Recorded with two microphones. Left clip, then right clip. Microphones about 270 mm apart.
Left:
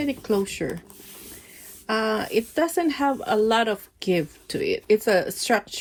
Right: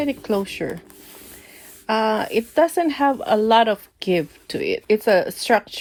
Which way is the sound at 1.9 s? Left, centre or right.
Right.